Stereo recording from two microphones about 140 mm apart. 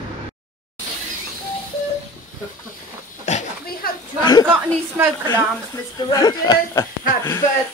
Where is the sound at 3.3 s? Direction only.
55° left (ahead or behind).